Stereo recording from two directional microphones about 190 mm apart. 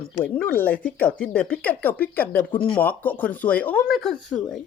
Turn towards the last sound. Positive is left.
turn(degrees=5)  # may be behind; listen again after turning